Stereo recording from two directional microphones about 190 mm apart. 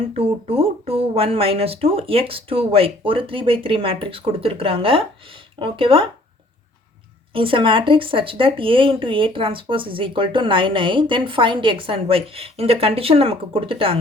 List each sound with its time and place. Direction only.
0.2 s speech: 30° right (ahead or behind)
7.3 s speech: 30° right (ahead or behind)